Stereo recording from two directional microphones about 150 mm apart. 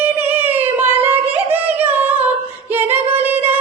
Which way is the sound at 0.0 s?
15° right (ahead or behind).